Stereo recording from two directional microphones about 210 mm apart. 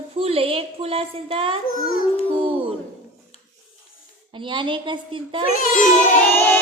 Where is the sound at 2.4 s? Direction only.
25° right (ahead or behind).